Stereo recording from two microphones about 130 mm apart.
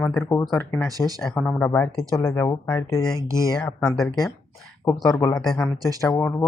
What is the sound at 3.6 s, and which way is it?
Speech, 10° left (ahead or behind).